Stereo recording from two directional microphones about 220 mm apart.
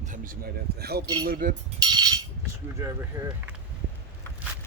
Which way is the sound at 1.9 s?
20° right (ahead or behind).